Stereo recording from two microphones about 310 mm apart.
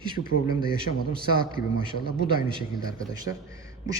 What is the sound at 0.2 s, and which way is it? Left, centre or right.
Speech, left.